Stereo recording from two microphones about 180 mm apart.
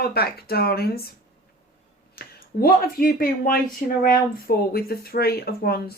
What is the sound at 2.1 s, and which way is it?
Speech, 55° left (ahead or behind).